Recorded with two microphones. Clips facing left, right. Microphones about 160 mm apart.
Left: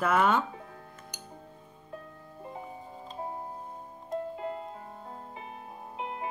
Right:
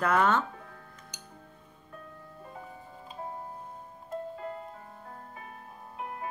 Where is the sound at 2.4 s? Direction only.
20° left (ahead or behind).